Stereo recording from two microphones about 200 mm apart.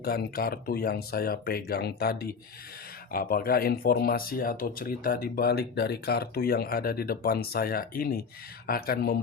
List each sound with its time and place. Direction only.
0.0 s speech: 50° left (ahead or behind)